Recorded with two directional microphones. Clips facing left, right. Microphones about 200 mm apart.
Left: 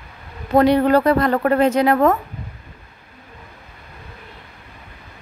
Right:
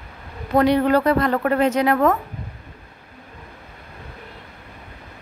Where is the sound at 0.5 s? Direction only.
35° left (ahead or behind).